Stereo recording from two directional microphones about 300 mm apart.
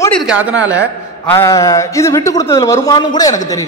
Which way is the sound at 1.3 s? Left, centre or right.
Centre.